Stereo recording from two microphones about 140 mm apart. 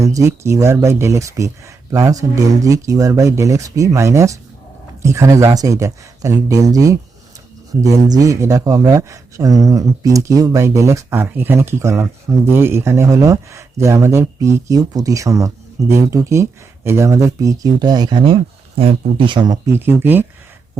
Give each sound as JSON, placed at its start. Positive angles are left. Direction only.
{"t": 0.0, "sound": "speech", "side_deg": -20}
{"t": 19.6, "sound": "speech", "side_deg": -15}